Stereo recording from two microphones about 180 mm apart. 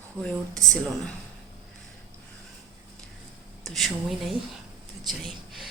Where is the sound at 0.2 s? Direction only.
5° left (ahead or behind).